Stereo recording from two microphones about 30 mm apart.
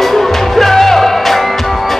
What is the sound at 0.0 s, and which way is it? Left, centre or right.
Music, centre.